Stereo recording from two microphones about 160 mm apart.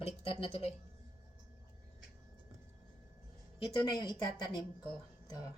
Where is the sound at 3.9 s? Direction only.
25° left (ahead or behind).